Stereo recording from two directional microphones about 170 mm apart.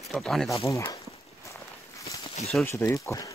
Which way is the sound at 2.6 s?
15° left (ahead or behind).